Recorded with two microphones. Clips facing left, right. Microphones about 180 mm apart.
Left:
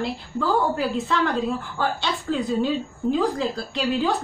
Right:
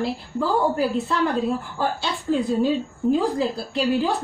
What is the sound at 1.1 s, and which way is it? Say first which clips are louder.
Speech: right 1 dB; 5° right (ahead or behind).